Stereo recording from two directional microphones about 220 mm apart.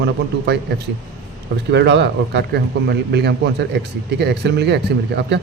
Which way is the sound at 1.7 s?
50° right (ahead or behind).